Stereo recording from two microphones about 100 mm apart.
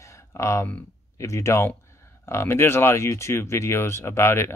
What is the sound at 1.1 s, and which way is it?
Speech, 30° left (ahead or behind).